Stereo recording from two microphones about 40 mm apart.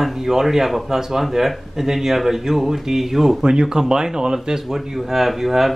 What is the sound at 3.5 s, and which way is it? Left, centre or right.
Speech, centre.